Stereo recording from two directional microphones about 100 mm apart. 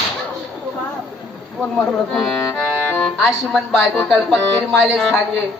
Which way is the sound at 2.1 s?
5° left (ahead or behind).